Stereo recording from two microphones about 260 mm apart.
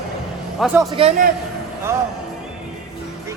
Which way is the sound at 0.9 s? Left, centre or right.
Right.